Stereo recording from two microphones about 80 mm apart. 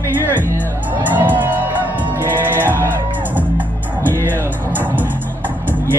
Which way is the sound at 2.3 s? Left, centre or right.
Right.